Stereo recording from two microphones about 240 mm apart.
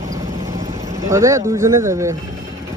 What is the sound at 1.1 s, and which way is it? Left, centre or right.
Speech, centre.